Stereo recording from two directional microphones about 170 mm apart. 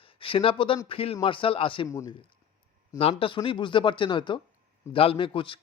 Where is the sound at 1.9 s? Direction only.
15° left (ahead or behind).